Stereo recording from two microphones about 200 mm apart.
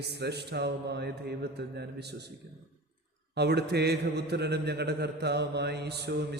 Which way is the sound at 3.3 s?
55° right (ahead or behind).